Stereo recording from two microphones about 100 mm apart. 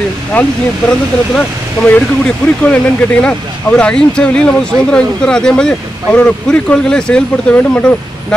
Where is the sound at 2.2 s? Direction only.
10° left (ahead or behind).